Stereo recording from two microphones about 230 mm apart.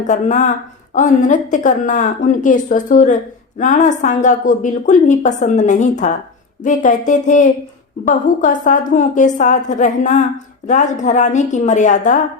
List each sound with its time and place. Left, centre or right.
0.0 s a woman's voice: left